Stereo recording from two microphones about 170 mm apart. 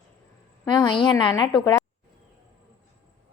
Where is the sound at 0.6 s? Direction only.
25° left (ahead or behind).